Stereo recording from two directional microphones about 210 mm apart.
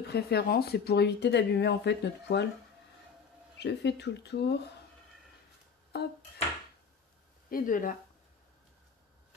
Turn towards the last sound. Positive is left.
turn(degrees=40)  # may be behind; listen again after turning